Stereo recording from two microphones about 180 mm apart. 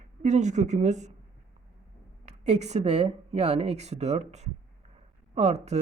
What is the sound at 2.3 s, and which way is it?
Speech, 40° right (ahead or behind).